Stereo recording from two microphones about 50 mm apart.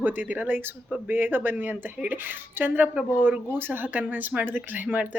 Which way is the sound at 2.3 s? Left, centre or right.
Right.